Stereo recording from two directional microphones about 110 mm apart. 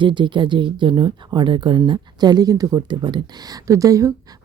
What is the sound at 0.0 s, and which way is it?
Speech, 45° right (ahead or behind).